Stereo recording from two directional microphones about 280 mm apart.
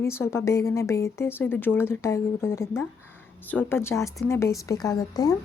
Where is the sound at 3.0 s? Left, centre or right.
Left.